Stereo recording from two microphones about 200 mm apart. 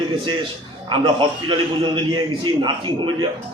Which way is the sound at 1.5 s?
25° right (ahead or behind).